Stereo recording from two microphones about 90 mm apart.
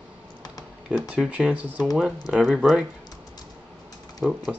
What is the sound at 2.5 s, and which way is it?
Speech, 5° right (ahead or behind).